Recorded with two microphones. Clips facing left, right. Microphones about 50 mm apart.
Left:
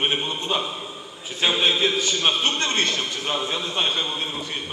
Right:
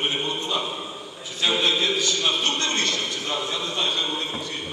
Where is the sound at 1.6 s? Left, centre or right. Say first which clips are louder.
Left 2 dB; left.